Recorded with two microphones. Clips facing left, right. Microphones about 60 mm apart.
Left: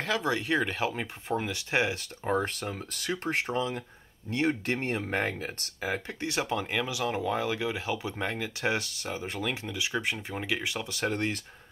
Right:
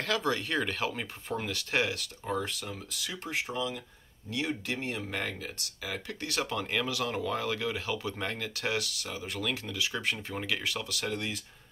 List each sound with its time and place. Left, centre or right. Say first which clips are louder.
0.0 s speech: left 1 dB; centre
2.2 s speech: left 5 dB; left; by 8.6 s centre
8.6 s speech: left 3 dB; left
11.1 s speech: left 5 dB; left